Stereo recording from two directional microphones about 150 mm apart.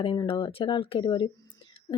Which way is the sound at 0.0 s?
35° left (ahead or behind).